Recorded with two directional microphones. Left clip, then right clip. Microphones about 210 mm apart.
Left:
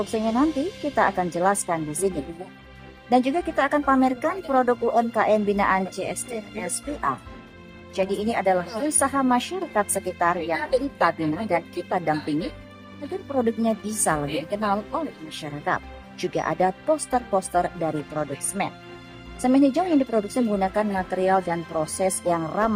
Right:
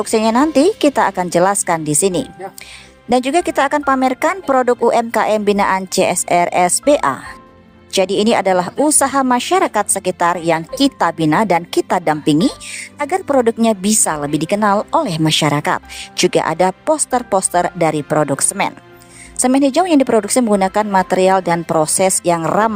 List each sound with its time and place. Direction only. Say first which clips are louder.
0.0 s a woman's voice: right 9 dB; 50° right (ahead or behind)
13.3 s a woman's voice: right 9 dB; 50° right (ahead or behind)